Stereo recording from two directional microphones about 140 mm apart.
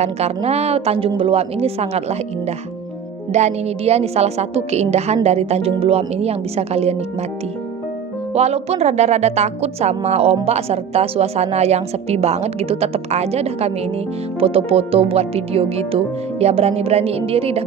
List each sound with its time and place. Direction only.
0.0 s speech: 50° right (ahead or behind)
8.3 s speech: 50° right (ahead or behind)